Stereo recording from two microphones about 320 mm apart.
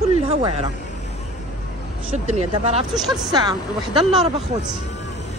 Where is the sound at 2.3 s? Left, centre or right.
Right.